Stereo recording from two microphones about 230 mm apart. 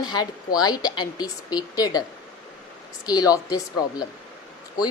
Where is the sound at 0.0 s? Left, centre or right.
Centre.